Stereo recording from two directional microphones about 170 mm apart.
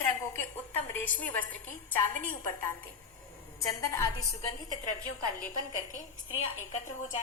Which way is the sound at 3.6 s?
20° left (ahead or behind).